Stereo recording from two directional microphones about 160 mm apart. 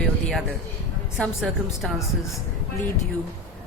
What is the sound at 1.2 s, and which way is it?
Speech, centre (ahead or behind).